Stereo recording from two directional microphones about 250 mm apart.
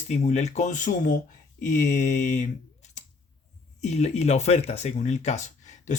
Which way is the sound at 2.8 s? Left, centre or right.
Left.